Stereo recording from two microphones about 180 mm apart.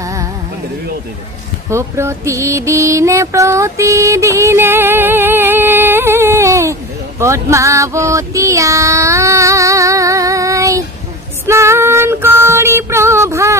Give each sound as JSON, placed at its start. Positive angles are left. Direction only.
{"t": 0.0, "sound": "music", "side_deg": -15}
{"t": 1.7, "sound": "music", "side_deg": -15}
{"t": 11.4, "sound": "female singing", "side_deg": -15}